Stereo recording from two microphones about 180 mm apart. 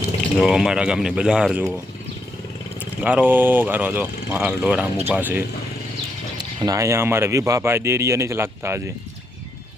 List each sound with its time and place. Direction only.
0.3 s speech: centre (ahead or behind)
3.0 s speech: 5° right (ahead or behind)
6.6 s speech: 20° right (ahead or behind)